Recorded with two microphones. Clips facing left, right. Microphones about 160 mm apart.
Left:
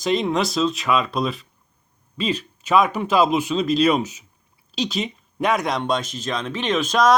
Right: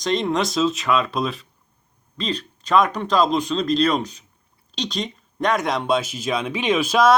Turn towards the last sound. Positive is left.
turn(degrees=-5)  # may be behind; listen again after turning